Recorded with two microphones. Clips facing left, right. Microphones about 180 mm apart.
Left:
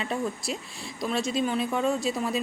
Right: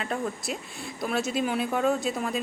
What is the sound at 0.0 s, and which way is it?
A woman's voice, centre (ahead or behind).